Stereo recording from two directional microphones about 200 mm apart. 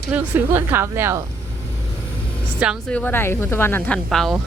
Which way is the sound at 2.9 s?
10° left (ahead or behind).